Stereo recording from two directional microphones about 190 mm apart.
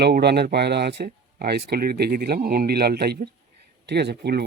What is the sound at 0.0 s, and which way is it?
Speech, 60° right (ahead or behind).